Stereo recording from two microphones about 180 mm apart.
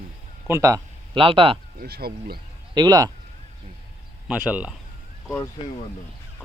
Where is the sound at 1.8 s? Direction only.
60° right (ahead or behind).